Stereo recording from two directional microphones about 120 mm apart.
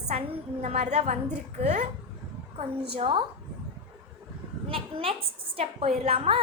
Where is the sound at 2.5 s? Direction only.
55° right (ahead or behind).